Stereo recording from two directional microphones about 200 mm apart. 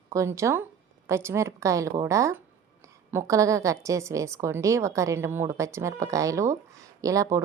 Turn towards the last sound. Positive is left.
turn(degrees=-15)  # may be behind; listen again after turning